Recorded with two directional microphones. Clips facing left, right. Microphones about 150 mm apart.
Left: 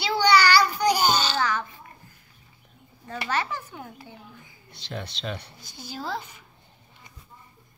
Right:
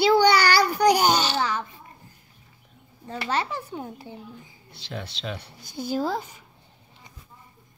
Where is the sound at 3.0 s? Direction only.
25° right (ahead or behind).